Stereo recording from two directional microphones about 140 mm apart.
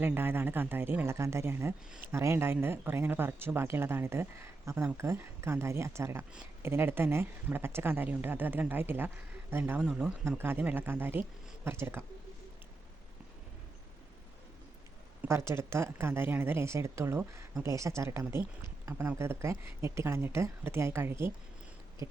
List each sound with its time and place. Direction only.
0.0 s speech: 15° right (ahead or behind)
9.8 s speech: 5° right (ahead or behind)
10.2 s speech: 15° right (ahead or behind)
15.2 s speech: 20° right (ahead or behind)